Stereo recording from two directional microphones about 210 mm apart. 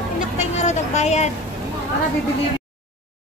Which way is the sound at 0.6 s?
30° left (ahead or behind).